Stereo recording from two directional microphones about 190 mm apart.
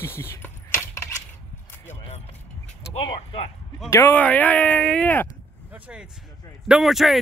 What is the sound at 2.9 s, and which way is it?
Speech, 30° left (ahead or behind).